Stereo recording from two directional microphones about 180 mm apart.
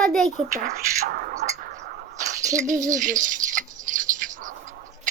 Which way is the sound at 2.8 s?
45° right (ahead or behind).